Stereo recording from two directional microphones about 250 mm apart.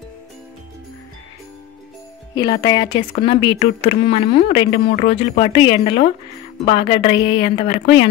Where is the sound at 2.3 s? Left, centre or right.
Centre.